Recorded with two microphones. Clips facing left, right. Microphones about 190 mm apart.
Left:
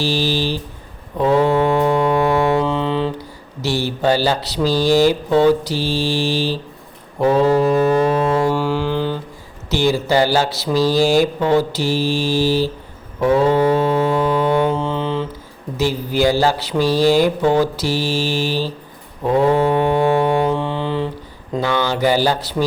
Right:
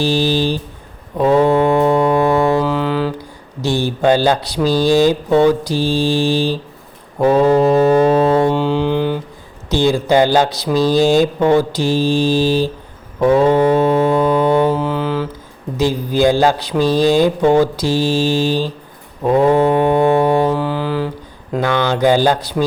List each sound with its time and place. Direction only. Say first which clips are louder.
0.0 s a sound: right 4 dB; 15° right (ahead or behind)
1.2 s music: right 3 dB; 15° right (ahead or behind)
2.6 s mantra: right 2 dB; 5° right (ahead or behind)
2.8 s a sound: right 2 dB; 25° left (ahead or behind)
3.6 s mantra: right 3 dB; 15° right (ahead or behind)
7.2 s music: right 3 dB; 15° right (ahead or behind)
10.1 s mantra: right 3 dB; 20° right (ahead or behind)
13.1 s a sound: right 3 dB; 20° right (ahead or behind)
14.7 s mantra: right 3 dB; 5° right (ahead or behind)
14.9 s mantra: right 2 dB; 25° left (ahead or behind)
15.8 s mantra: right 3 dB; 15° right (ahead or behind)
20.4 s mantra: right 2 dB; centre (ahead or behind)
21.6 s mantra: right 3 dB; 15° right (ahead or behind)